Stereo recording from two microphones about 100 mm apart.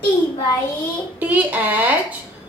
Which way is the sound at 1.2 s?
15° right (ahead or behind).